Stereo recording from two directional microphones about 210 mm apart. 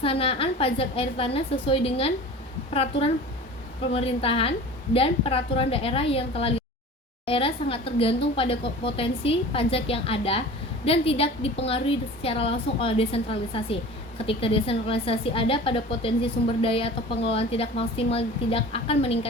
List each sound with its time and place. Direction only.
0.0 s a woman's voice: 25° left (ahead or behind)